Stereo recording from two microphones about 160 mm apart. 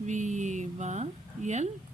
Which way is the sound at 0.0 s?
50° right (ahead or behind).